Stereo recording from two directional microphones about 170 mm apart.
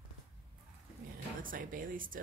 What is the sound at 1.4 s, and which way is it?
Speech, 55° right (ahead or behind).